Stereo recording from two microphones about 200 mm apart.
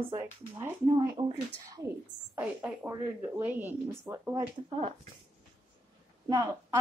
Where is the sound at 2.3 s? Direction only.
10° right (ahead or behind).